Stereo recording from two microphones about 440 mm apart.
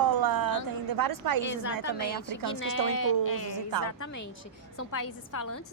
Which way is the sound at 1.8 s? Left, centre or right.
Left.